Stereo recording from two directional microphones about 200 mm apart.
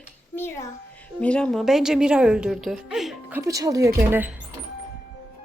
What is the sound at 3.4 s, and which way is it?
Speech, 15° right (ahead or behind).